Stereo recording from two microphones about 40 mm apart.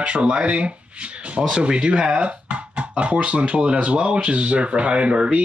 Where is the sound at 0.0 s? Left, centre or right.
Right.